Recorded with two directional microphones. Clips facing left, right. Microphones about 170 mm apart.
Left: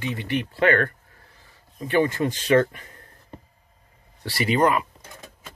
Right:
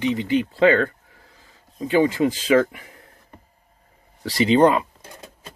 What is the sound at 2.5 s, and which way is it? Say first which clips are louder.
Speech: left 1 dB; 10° right (ahead or behind).